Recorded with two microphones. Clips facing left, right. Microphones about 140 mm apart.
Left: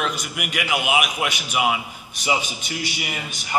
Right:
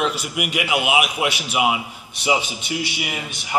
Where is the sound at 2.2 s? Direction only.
25° right (ahead or behind).